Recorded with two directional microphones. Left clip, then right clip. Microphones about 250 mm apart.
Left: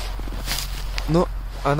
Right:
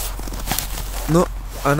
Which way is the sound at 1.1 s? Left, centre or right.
Centre.